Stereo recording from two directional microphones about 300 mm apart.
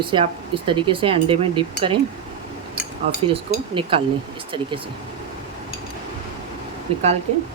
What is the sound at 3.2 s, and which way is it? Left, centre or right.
Speech, centre.